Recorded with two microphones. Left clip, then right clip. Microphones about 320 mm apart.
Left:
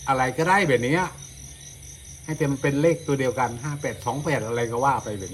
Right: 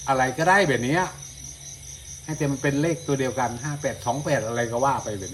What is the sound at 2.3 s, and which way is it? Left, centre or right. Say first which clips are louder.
Speech: left 1 dB; centre.